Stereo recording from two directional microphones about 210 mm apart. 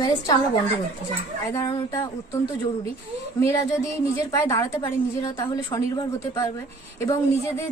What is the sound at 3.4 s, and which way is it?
A woman's voice, 15° left (ahead or behind).